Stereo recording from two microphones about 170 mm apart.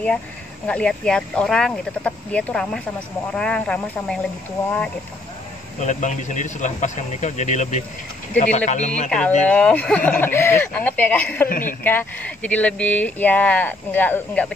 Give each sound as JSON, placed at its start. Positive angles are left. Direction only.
{"t": 0.7, "sound": "speech", "side_deg": 5}
{"t": 5.8, "sound": "speech", "side_deg": 45}
{"t": 9.5, "sound": "speech", "side_deg": 5}
{"t": 11.4, "sound": "speech", "side_deg": 55}
{"t": 11.8, "sound": "speech", "side_deg": 10}